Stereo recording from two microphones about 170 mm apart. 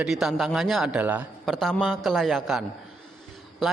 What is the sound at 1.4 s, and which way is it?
Speech, centre (ahead or behind).